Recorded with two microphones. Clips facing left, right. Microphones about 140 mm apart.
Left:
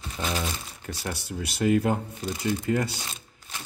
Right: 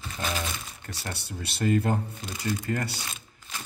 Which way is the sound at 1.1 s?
5° left (ahead or behind).